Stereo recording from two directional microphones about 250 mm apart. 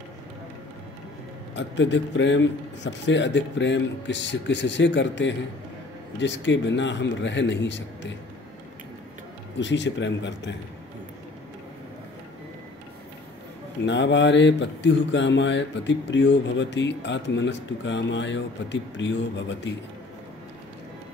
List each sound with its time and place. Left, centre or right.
1.5 s speech: left
9.6 s speech: left
13.8 s speech: left